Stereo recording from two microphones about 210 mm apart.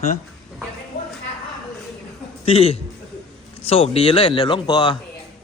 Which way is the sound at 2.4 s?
25° left (ahead or behind).